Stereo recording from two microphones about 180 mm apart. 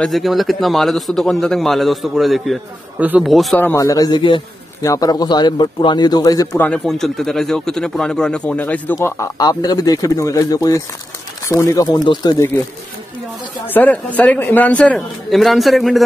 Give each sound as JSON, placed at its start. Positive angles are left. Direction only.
{"t": 0.0, "sound": "speech", "side_deg": 0}
{"t": 3.6, "sound": "a man's voice", "side_deg": 20}
{"t": 13.7, "sound": "a man's voice", "side_deg": 10}